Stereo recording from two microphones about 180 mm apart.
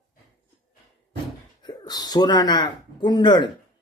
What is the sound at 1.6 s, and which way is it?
Speech, 20° left (ahead or behind).